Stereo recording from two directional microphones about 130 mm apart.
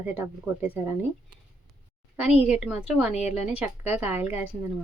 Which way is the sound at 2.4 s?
5° right (ahead or behind).